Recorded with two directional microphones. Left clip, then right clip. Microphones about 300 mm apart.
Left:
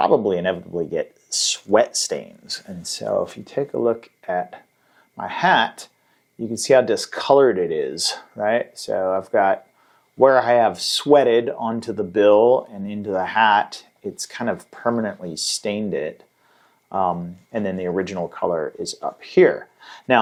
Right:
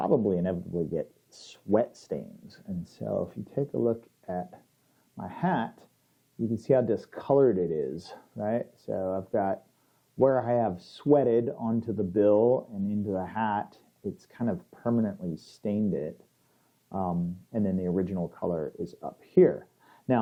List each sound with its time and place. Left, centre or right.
0.3 s speech: centre
0.6 s speech: centre
0.9 s speech: centre
12.4 s speech: left
19.2 s speech: centre